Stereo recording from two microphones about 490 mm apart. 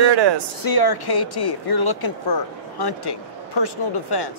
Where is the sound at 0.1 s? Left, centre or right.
Right.